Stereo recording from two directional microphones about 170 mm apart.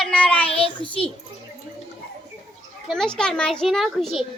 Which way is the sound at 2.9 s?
5° left (ahead or behind).